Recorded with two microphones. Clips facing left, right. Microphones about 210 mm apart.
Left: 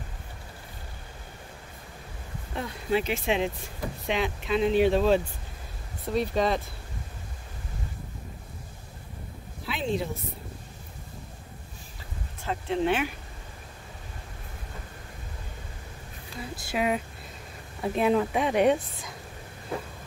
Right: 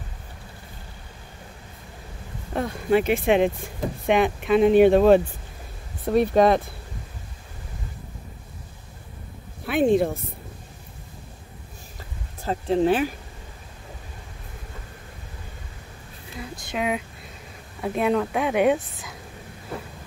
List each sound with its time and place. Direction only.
2.5 s speech: 55° right (ahead or behind)
9.7 s a sound: 55° right (ahead or behind)
12.4 s speech: 35° right (ahead or behind)
16.6 s a woman's voice: centre (ahead or behind)